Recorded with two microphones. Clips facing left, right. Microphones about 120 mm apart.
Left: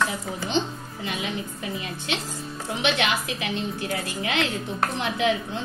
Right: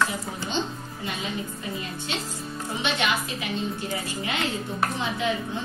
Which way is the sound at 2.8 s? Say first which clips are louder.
Left 2 dB; 90° left.